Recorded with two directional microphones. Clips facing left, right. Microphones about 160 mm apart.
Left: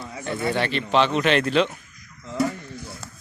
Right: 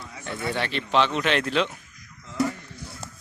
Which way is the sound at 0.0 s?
45° left (ahead or behind).